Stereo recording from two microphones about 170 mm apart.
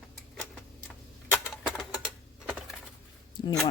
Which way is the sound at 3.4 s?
25° left (ahead or behind).